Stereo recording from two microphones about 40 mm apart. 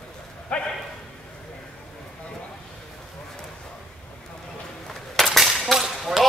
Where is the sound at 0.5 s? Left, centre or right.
Left.